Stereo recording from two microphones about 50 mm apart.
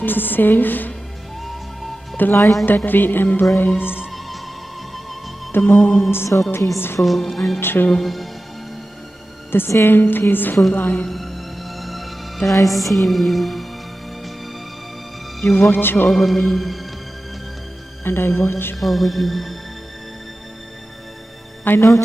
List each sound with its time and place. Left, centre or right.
0.0 s a woman's voice: left
1.4 s music: centre
2.2 s a woman's voice: left
5.5 s a woman's voice: left
7.0 s music: centre
7.6 s a woman's voice: left
8.0 s music: centre
9.5 s a woman's voice: left
11.1 s music: centre
15.4 s a woman's voice: left
16.1 s music: centre
18.0 s a woman's voice: left
18.8 s music: centre
21.7 s a woman's voice: left